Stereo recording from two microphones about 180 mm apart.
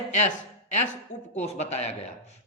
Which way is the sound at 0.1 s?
40° left (ahead or behind).